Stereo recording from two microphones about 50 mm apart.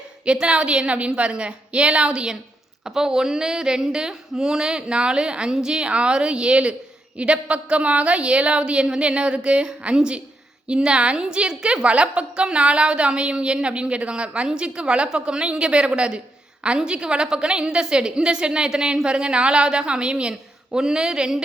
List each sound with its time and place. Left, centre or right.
0.3 s a woman's voice: right